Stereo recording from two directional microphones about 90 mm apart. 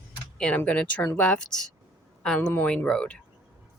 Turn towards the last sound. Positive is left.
turn(degrees=10)  # may be behind; listen again after turning